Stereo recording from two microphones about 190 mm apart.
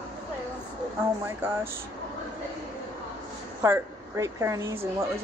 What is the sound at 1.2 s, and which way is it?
Speech, 10° right (ahead or behind).